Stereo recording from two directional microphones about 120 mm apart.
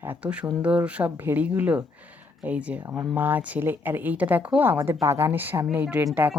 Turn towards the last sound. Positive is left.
turn(degrees=-20)  # may be behind; listen again after turning